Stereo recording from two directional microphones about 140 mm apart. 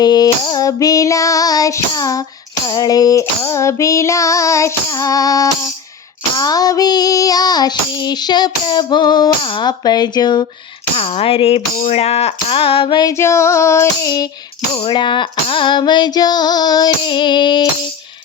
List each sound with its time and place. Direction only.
0.0 s child singing: 30° left (ahead or behind)
10.9 s a sound: 45° left (ahead or behind)
13.1 s child singing: 20° left (ahead or behind)
14.8 s female singing: 35° left (ahead or behind)